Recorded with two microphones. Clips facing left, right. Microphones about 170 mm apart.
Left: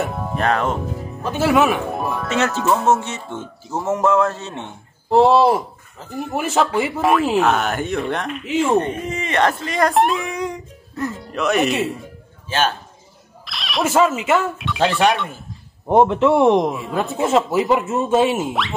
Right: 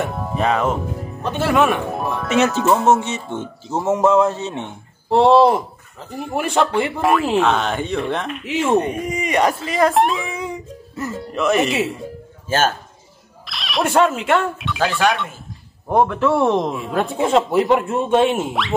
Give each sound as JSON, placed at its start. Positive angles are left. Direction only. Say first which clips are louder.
{"t": 0.0, "sound": "speech", "louder": "right 1 dB", "side_deg": 0}
{"t": 2.2, "sound": "speech", "louder": "right 4 dB", "side_deg": -15}
{"t": 5.1, "sound": "speech", "louder": "right 1 dB", "side_deg": 5}
{"t": 9.0, "sound": "speech", "louder": "right 1 dB", "side_deg": -15}
{"t": 12.4, "sound": "a man's voice", "louder": "right 2 dB", "side_deg": -45}
{"t": 13.5, "sound": "speech", "louder": "even", "side_deg": 0}
{"t": 15.9, "sound": "speech", "louder": "left 3 dB", "side_deg": 20}
{"t": 16.7, "sound": "speech", "louder": "right 1 dB", "side_deg": 0}